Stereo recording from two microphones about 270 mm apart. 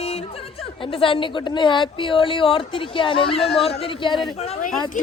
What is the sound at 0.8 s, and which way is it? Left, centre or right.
A woman's voice, centre.